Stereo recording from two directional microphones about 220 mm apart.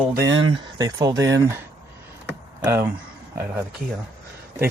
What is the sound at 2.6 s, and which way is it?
Speech, 10° right (ahead or behind).